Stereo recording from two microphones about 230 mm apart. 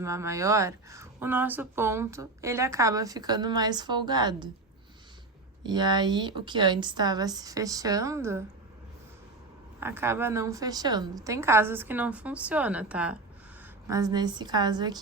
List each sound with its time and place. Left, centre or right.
0.0 s speech: centre
5.6 s speech: centre
9.8 s speech: centre